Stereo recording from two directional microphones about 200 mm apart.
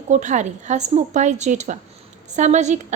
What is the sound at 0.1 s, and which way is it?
A woman's voice, 35° right (ahead or behind).